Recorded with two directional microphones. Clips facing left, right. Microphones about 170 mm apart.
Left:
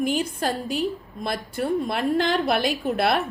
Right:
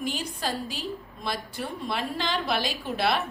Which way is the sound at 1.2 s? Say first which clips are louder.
Left 7 dB; 50° left (ahead or behind).